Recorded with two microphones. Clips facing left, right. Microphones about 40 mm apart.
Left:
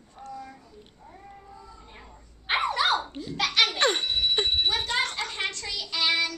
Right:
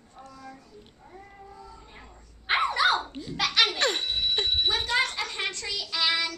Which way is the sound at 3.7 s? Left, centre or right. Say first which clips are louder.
Left 2 dB; centre.